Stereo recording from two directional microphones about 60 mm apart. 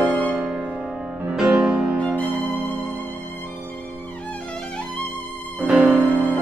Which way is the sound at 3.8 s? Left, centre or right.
Left.